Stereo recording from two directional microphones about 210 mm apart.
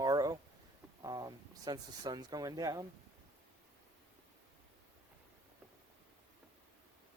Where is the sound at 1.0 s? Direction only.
20° right (ahead or behind).